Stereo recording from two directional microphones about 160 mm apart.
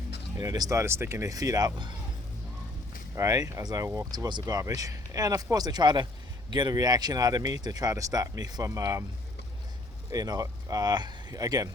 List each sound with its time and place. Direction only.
0.3 s speech: 25° right (ahead or behind)
3.2 s speech: 20° right (ahead or behind)
10.1 s speech: 25° right (ahead or behind)